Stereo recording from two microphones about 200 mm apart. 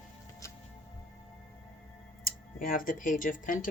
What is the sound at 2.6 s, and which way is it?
Speech, 45° left (ahead or behind).